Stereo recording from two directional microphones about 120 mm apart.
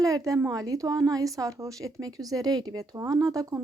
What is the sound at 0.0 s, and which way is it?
Speech, 30° right (ahead or behind).